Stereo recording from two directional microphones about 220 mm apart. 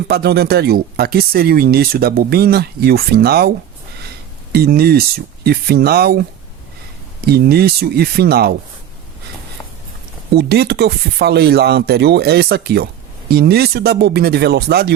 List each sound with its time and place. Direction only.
0.1 s speech: 45° right (ahead or behind)
4.5 s speech: 45° right (ahead or behind)
7.3 s speech: 45° right (ahead or behind)
10.3 s speech: 50° right (ahead or behind)